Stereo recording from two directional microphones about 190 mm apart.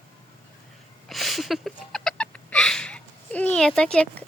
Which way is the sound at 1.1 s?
Centre (ahead or behind).